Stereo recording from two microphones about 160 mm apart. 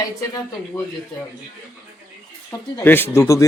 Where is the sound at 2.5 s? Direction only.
15° left (ahead or behind).